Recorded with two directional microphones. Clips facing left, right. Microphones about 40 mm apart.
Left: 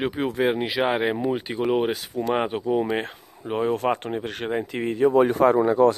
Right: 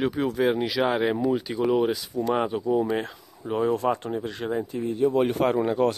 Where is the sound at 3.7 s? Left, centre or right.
Left.